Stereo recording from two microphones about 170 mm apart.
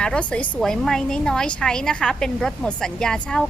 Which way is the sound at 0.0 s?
5° left (ahead or behind).